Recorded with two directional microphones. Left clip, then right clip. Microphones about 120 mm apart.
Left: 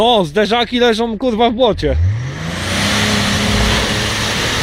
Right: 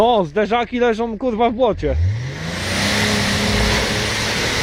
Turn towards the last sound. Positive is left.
turn(degrees=-45)  # may be behind; listen again after turning